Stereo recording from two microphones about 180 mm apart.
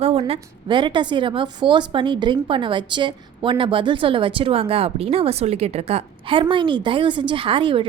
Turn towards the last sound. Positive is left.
turn(degrees=-30)  # may be behind; listen again after turning